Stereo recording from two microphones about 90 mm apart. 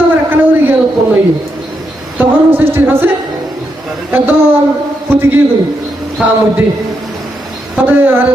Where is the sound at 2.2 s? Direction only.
25° right (ahead or behind).